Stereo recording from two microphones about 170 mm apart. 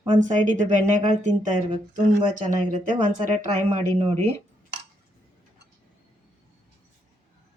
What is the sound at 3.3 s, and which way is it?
Speech, 45° right (ahead or behind).